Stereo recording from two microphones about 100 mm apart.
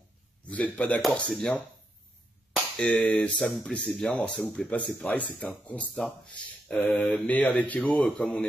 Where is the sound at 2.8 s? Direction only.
10° left (ahead or behind).